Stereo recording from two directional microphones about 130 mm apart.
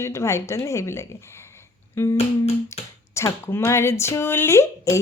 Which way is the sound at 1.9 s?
20° left (ahead or behind).